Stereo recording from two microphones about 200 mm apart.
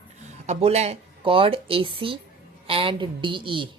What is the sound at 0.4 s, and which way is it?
A woman's voice, 30° right (ahead or behind).